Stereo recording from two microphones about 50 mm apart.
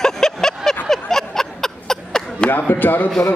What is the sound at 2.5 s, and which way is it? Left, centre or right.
Speech, left.